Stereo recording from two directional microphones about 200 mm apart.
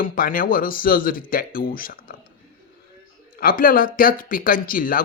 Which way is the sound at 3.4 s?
45° left (ahead or behind).